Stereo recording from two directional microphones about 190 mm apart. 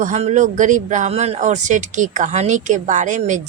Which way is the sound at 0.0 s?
40° right (ahead or behind).